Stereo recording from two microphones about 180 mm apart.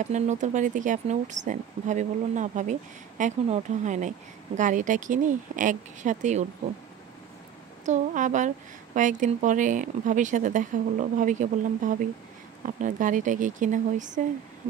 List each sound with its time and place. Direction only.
0.0 s speech: 40° right (ahead or behind)
7.8 s speech: 45° right (ahead or behind)